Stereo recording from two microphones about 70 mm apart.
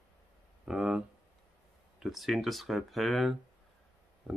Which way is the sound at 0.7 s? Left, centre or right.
Centre.